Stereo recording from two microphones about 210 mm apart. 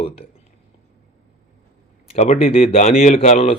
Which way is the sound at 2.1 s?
30° left (ahead or behind).